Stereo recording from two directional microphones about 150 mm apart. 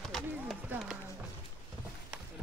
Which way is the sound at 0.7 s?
10° right (ahead or behind).